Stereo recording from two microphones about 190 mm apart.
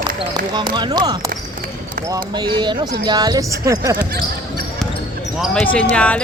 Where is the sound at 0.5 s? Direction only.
25° right (ahead or behind).